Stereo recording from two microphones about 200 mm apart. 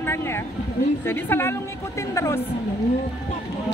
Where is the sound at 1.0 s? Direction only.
10° left (ahead or behind).